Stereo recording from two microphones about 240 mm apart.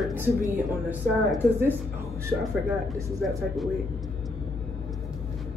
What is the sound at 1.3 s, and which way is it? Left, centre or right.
Speech, centre.